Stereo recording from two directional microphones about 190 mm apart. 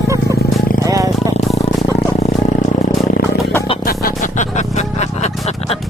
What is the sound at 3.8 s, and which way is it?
Music, 50° left (ahead or behind).